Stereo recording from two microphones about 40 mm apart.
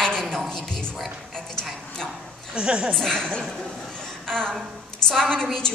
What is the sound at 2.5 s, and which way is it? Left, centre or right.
Speech, right.